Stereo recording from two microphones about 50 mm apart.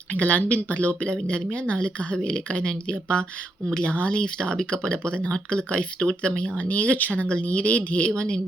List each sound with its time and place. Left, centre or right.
0.1 s speech: left